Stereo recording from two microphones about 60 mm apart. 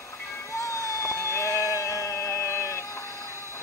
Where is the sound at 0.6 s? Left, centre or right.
Left.